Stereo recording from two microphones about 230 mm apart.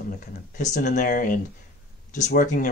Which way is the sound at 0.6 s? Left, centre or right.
Left.